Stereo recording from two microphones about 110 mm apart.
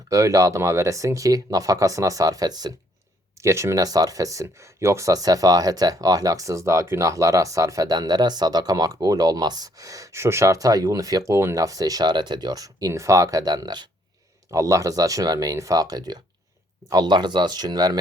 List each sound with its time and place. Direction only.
0.1 s speech: 30° right (ahead or behind)
3.4 s speech: 25° right (ahead or behind)